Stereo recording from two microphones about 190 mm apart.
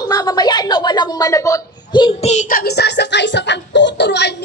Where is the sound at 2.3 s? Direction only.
45° left (ahead or behind).